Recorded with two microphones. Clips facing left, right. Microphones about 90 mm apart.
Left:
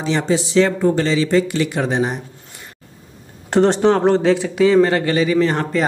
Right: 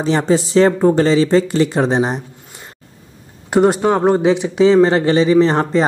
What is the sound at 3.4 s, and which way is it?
A man's voice, 10° right (ahead or behind).